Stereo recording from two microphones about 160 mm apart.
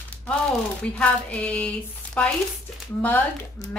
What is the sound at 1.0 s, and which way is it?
A woman's voice, 10° left (ahead or behind).